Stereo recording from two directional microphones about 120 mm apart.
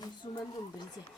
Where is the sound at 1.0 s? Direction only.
35° left (ahead or behind).